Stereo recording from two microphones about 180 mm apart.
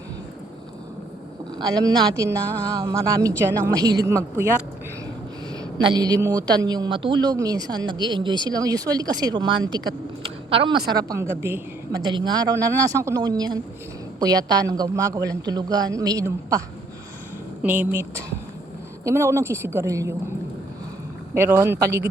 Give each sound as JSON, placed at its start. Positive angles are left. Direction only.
{"t": 1.5, "sound": "a woman's voice", "side_deg": -20}
{"t": 5.7, "sound": "a woman's voice", "side_deg": -20}
{"t": 17.6, "sound": "speech", "side_deg": -10}
{"t": 21.3, "sound": "speech", "side_deg": -15}